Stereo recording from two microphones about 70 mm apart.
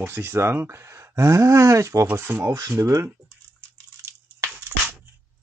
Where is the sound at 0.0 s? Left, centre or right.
Right.